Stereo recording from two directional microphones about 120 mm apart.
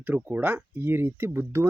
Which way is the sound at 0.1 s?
15° right (ahead or behind).